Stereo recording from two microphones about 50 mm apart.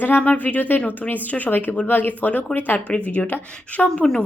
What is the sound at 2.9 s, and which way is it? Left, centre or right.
A woman's voice, left.